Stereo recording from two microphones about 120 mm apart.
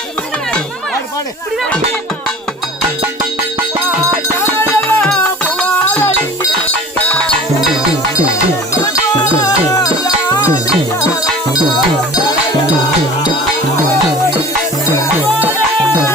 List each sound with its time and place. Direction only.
4.8 s music: 5° left (ahead or behind)
9.4 s music: 30° left (ahead or behind)